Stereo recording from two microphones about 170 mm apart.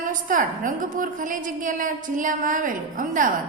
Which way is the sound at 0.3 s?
50° right (ahead or behind).